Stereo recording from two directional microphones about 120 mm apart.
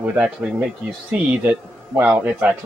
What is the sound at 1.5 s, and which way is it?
A man's voice, 20° right (ahead or behind).